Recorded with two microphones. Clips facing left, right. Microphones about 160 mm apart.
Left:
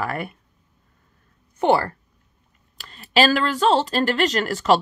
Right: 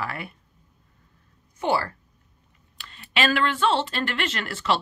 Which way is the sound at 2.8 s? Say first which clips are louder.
Left 7 dB; 35° left (ahead or behind).